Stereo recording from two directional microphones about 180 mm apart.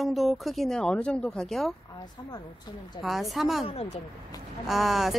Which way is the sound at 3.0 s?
Centre (ahead or behind).